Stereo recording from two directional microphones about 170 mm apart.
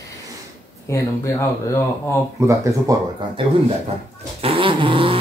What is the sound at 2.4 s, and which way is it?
Speech, 20° right (ahead or behind).